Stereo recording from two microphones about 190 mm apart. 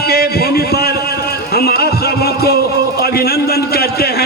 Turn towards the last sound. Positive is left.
turn(degrees=55)  # may be behind; listen again after turning